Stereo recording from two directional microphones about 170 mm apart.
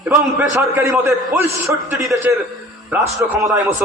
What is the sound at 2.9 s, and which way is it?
Speech, 15° right (ahead or behind).